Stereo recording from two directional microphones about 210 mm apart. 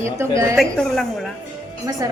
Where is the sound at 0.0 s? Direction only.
15° right (ahead or behind).